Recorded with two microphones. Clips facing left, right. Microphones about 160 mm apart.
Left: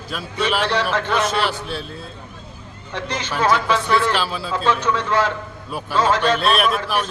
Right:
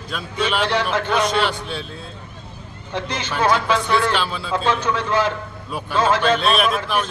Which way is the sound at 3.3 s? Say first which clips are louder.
Even; centre (ahead or behind).